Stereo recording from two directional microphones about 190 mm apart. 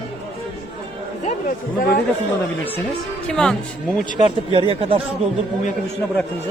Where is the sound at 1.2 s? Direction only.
45° left (ahead or behind).